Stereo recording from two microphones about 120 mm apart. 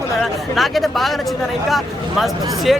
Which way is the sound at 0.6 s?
Centre (ahead or behind).